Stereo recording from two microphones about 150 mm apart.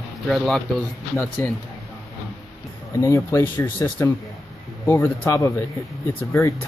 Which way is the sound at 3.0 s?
20° left (ahead or behind).